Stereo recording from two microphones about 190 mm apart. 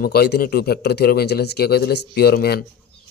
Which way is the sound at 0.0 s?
55° left (ahead or behind).